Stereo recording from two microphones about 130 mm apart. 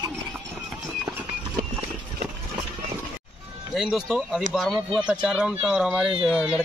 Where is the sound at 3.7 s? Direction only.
5° right (ahead or behind).